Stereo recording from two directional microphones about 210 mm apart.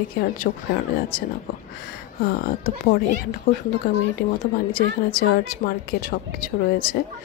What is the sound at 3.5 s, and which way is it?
Speech, 45° left (ahead or behind).